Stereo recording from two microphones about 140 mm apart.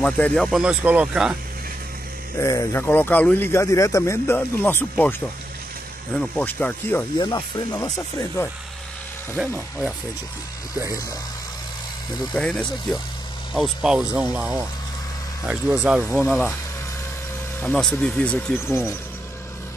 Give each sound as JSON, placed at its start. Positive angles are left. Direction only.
{"t": 0.0, "sound": "speech", "side_deg": 5}
{"t": 2.4, "sound": "speech", "side_deg": 25}
{"t": 6.1, "sound": "speech", "side_deg": 10}
{"t": 7.2, "sound": "speech", "side_deg": 30}
{"t": 9.4, "sound": "speech", "side_deg": -5}
{"t": 12.4, "sound": "speech", "side_deg": 5}
{"t": 17.6, "sound": "speech", "side_deg": 10}